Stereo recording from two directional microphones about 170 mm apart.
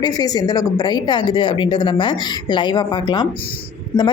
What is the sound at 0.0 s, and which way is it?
A woman's voice, 25° left (ahead or behind).